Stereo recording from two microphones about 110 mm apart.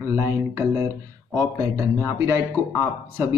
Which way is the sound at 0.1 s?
25° right (ahead or behind).